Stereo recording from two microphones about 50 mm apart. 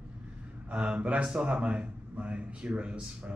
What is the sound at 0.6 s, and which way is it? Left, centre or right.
A man's voice, centre.